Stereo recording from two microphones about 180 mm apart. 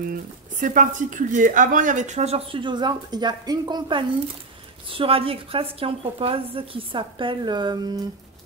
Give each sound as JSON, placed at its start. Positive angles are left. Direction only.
{"t": 0.6, "sound": "speech", "side_deg": -45}